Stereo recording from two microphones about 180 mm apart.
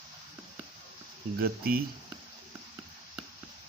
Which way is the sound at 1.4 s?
55° right (ahead or behind).